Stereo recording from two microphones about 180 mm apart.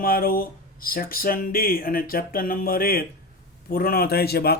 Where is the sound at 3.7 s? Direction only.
55° left (ahead or behind).